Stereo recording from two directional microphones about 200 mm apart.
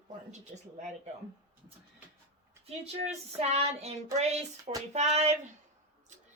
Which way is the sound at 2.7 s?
30° right (ahead or behind).